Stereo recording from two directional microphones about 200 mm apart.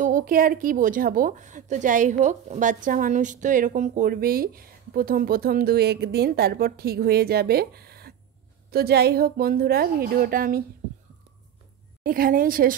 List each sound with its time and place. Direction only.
0.0 s a woman's voice: 40° right (ahead or behind)
12.0 s a woman's voice: 45° right (ahead or behind)